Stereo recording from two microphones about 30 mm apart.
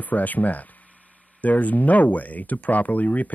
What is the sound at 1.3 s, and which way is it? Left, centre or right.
Speech, left.